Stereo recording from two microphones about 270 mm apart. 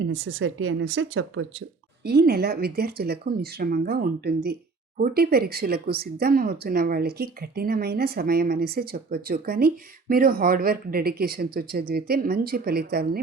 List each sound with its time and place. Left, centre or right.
0.0 s speech: right